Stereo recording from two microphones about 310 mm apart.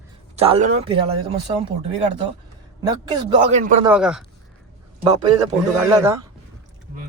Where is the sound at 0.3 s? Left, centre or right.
Centre.